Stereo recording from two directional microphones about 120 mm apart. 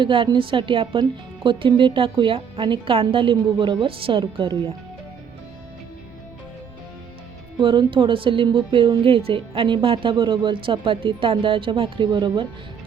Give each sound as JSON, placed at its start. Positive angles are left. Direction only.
{"t": 0.0, "sound": "a woman's voice", "side_deg": -45}
{"t": 7.6, "sound": "a woman's voice", "side_deg": -45}